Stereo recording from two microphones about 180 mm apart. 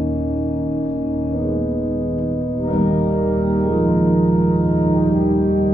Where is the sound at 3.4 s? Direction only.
30° left (ahead or behind).